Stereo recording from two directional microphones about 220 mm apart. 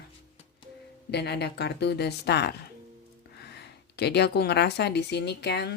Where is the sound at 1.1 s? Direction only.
50° left (ahead or behind).